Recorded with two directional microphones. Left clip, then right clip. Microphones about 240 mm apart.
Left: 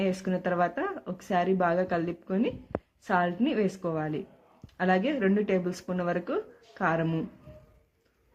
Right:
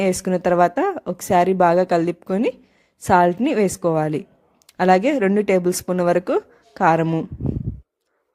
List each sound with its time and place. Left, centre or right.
0.0 s a woman's voice: right